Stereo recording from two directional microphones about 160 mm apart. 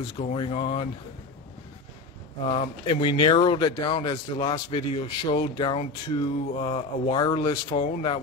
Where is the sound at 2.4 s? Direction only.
35° left (ahead or behind).